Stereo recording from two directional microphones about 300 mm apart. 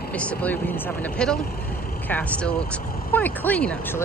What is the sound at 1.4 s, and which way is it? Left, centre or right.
Vehicle, left.